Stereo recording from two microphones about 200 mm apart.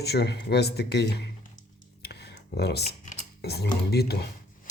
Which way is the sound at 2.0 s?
55° left (ahead or behind).